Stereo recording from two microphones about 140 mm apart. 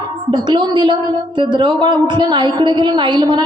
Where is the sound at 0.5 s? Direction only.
35° right (ahead or behind).